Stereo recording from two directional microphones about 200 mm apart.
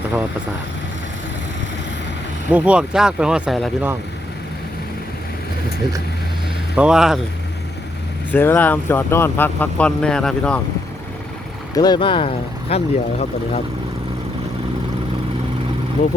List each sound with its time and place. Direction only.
2.5 s speech: 5° right (ahead or behind)
6.7 s speech: 5° right (ahead or behind)
8.3 s speech: 10° left (ahead or behind)
11.7 s speech: 20° left (ahead or behind)